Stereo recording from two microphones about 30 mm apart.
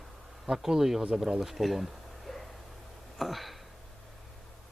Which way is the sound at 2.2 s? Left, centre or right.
Centre.